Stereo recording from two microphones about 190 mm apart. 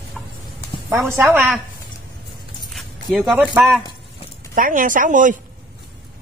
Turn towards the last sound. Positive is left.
turn(degrees=-40)  # may be behind; listen again after turning